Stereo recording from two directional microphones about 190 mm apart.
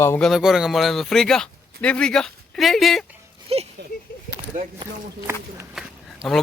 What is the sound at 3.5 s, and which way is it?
Speech, 30° right (ahead or behind).